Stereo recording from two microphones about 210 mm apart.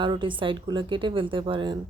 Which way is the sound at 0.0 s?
25° right (ahead or behind).